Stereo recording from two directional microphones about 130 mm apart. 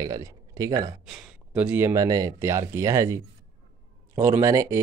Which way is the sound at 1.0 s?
5° right (ahead or behind).